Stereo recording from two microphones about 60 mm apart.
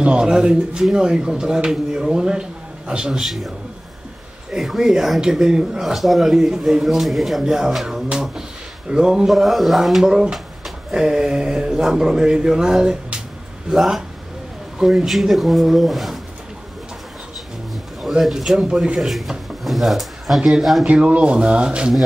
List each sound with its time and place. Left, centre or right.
0.0 s speech: centre
18.0 s speech: centre
20.8 s speech: right